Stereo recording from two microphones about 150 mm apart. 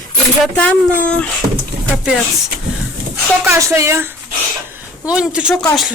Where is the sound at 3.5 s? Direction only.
20° right (ahead or behind).